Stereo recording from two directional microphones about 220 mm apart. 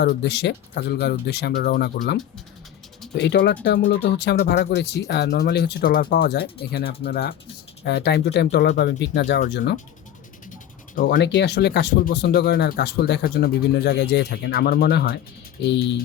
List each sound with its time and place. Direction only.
0.0 s speech: 50° left (ahead or behind)
3.2 s speech: 50° left (ahead or behind)
10.9 s speech: 45° left (ahead or behind)